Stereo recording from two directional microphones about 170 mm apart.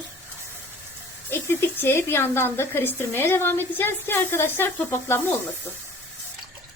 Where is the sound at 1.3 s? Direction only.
15° left (ahead or behind).